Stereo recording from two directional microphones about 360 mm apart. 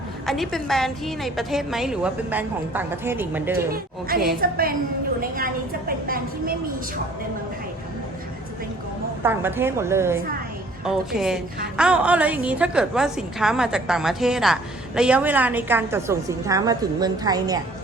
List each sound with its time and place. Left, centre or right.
0.3 s a woman's voice: centre
4.4 s a woman's voice: right
9.2 s a woman's voice: centre